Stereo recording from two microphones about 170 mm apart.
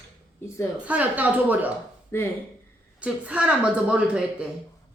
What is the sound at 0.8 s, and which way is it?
Speech, 10° right (ahead or behind).